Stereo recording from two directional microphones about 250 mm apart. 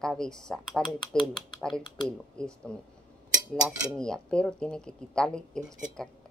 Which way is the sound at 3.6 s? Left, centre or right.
Centre.